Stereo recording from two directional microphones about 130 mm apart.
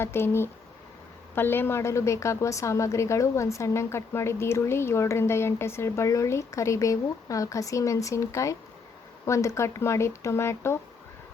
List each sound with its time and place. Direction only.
0.0 s a woman's voice: 20° left (ahead or behind)